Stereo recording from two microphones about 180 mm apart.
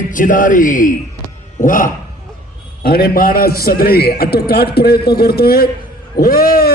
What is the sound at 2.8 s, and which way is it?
A man's voice, 60° left (ahead or behind).